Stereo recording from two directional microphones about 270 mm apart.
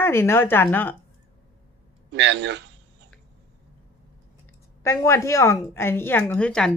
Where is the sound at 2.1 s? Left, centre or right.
Right.